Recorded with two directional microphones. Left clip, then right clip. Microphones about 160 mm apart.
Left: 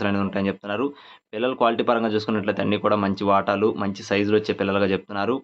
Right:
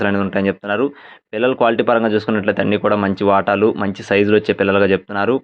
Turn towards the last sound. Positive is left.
turn(degrees=-30)  # may be behind; listen again after turning